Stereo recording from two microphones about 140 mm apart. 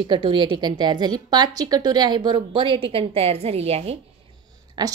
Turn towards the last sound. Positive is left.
turn(degrees=-30)  # may be behind; listen again after turning